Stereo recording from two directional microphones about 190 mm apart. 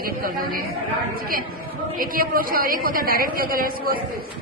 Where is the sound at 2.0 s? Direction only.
50° right (ahead or behind).